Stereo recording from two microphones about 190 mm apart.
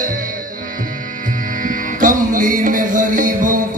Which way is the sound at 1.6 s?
45° right (ahead or behind).